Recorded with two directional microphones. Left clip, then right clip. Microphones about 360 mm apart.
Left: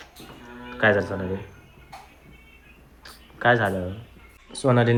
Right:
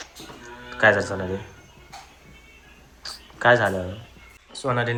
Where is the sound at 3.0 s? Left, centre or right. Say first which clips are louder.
Right 2 dB; centre.